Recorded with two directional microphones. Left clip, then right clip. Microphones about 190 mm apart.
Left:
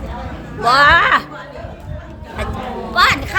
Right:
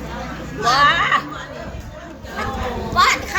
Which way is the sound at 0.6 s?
55° left (ahead or behind).